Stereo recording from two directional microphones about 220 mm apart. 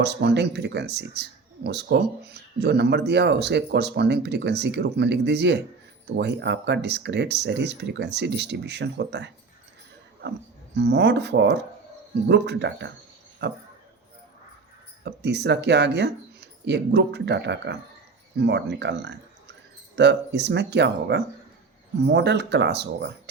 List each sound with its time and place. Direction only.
0.0 s speech: 50° right (ahead or behind)
10.8 s speech: 50° right (ahead or behind)
15.0 s speech: 50° right (ahead or behind)